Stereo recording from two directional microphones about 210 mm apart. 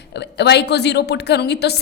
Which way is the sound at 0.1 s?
55° left (ahead or behind).